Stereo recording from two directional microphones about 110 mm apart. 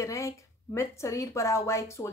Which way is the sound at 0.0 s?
30° left (ahead or behind).